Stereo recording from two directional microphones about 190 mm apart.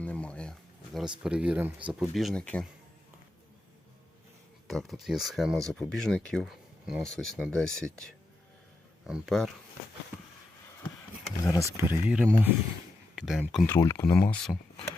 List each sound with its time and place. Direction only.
0.0 s a sound: 5° left (ahead or behind)
1.2 s speech: 5° right (ahead or behind)
4.7 s speech: centre (ahead or behind)
9.0 s speech: centre (ahead or behind)
11.4 s speech: 15° left (ahead or behind)
11.8 s speech: 10° right (ahead or behind)
13.7 s speech: 15° left (ahead or behind)